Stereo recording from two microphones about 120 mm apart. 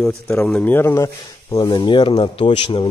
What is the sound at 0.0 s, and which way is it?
Speech, 5° left (ahead or behind).